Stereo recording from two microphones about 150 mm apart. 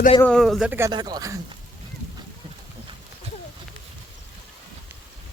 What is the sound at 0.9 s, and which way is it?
Speech, 30° right (ahead or behind).